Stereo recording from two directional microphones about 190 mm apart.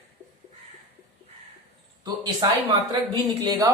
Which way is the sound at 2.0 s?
20° right (ahead or behind).